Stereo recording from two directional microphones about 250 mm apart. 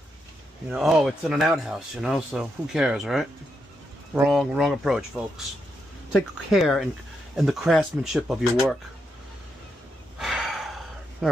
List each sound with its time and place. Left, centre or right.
0.7 s speech: centre
10.1 s sigh: centre